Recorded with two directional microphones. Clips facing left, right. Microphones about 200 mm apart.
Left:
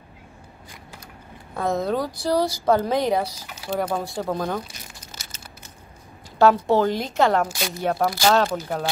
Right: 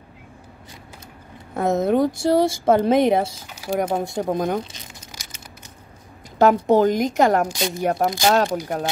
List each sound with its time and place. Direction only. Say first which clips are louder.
1.5 s speech: right 4 dB; 20° right (ahead or behind)
5.1 s a sound: right 1 dB; 15° right (ahead or behind)
6.3 s speech: right 2 dB; 20° right (ahead or behind)